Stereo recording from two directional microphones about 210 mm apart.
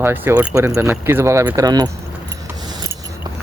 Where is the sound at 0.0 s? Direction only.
10° right (ahead or behind).